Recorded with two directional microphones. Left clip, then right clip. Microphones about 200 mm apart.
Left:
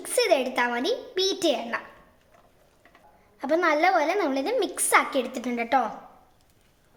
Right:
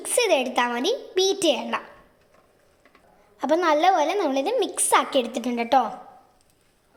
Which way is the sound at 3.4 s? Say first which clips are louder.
Right 2 dB; 15° right (ahead or behind).